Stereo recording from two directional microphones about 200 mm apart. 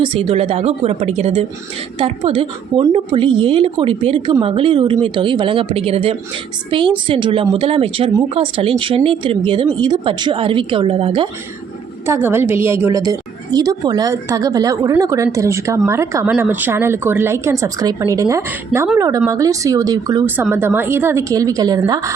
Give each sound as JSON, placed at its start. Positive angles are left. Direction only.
{"t": 0.0, "sound": "speech", "side_deg": -30}
{"t": 12.0, "sound": "a woman's voice", "side_deg": -10}